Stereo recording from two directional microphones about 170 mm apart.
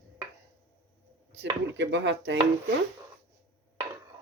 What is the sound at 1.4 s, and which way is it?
Speech, 90° right.